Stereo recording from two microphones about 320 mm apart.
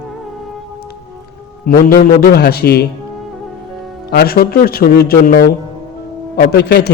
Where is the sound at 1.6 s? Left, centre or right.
Left.